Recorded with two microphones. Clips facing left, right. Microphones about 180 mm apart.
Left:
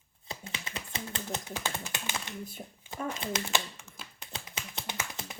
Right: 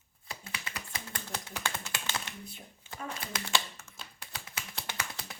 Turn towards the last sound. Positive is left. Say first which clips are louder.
# left 2 dB
turn(degrees=20)  # may be behind; listen again after turning